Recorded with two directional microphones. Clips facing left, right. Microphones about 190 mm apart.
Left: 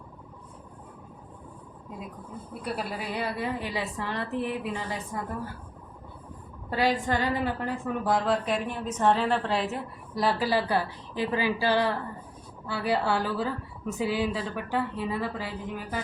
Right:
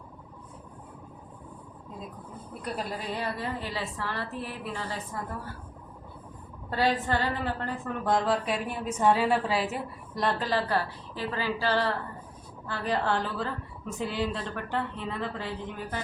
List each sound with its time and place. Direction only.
2.6 s a woman's voice: 5° left (ahead or behind)
6.7 s a woman's voice: 15° left (ahead or behind)